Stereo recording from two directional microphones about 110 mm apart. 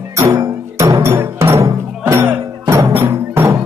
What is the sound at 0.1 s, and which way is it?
Music, 30° right (ahead or behind).